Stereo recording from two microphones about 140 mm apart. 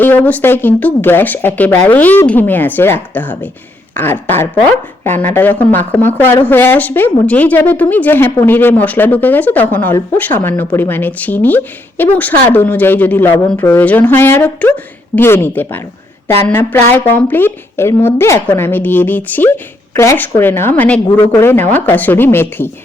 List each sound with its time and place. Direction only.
0.0 s speech: 15° left (ahead or behind)